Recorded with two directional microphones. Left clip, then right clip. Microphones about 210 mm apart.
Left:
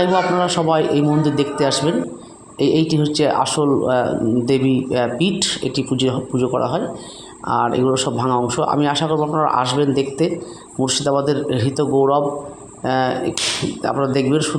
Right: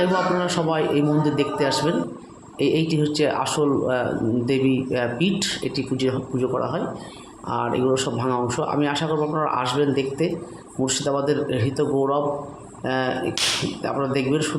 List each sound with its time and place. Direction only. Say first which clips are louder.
0.0 s speech: left 5 dB; 20° left (ahead or behind)